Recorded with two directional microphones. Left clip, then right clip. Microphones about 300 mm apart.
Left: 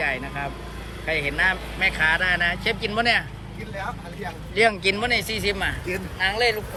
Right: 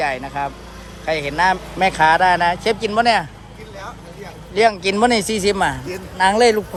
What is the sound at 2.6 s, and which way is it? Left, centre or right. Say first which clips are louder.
Speech: right 6 dB; centre.